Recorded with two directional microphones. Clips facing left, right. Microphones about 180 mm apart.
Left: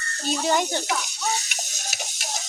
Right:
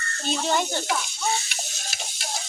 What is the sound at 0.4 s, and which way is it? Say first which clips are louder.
Speech: left 2 dB; 15° left (ahead or behind).